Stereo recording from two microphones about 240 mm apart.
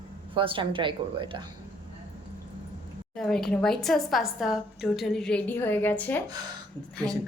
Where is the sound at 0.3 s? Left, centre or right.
Right.